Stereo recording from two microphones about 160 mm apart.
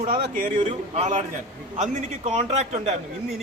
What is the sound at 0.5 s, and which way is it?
A man's voice, 40° right (ahead or behind).